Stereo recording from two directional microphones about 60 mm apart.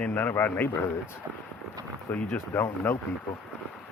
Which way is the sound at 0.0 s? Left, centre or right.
Left.